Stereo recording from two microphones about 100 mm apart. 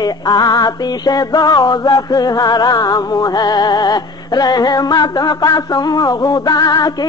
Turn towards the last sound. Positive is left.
turn(degrees=45)  # may be behind; listen again after turning